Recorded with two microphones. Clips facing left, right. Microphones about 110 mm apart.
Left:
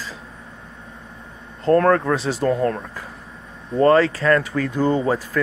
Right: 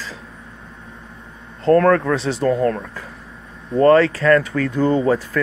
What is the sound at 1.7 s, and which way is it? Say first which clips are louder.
Speech: right 2 dB; 25° left (ahead or behind).